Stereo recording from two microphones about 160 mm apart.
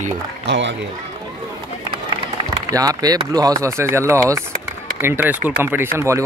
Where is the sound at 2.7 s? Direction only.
20° right (ahead or behind).